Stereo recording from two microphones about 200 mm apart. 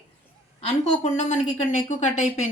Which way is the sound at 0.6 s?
35° left (ahead or behind).